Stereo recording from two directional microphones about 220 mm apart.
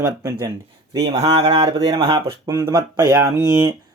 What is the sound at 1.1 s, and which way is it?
Speech, 25° right (ahead or behind).